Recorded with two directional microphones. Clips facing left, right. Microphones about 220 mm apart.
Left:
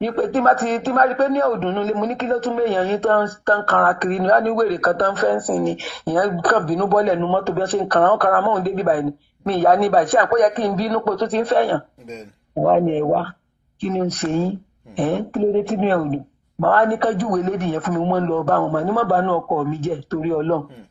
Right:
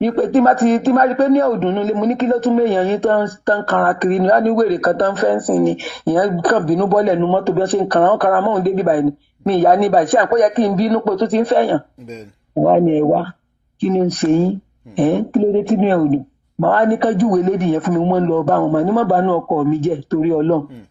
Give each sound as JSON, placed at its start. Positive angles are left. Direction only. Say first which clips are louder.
{"t": 0.0, "sound": "speech", "louder": "right 5 dB", "side_deg": -15}